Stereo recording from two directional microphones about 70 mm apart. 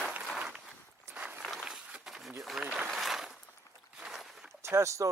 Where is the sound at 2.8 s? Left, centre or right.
Centre.